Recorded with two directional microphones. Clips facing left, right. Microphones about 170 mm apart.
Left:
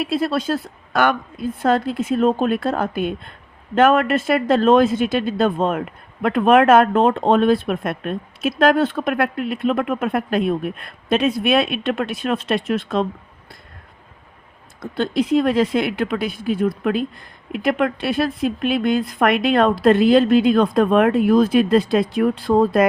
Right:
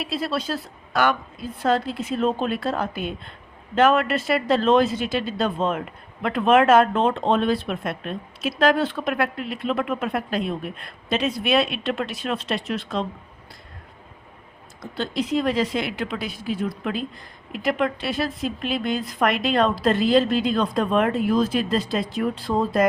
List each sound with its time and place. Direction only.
0.0 s speech: 50° left (ahead or behind)
14.8 s speech: 55° left (ahead or behind)